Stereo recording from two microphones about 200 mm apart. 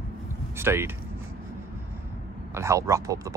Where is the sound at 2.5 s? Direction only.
15° right (ahead or behind).